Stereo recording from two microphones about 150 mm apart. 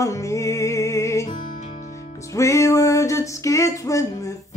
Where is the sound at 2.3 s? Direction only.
20° left (ahead or behind).